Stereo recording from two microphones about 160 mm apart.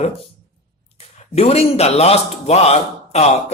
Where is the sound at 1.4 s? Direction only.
40° left (ahead or behind).